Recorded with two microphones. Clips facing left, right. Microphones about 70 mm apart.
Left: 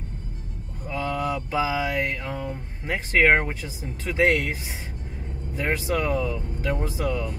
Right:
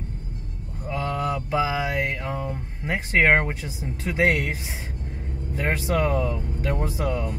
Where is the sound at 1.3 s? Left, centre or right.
Centre.